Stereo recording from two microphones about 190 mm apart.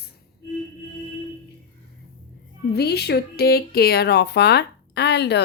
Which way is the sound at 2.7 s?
55° left (ahead or behind).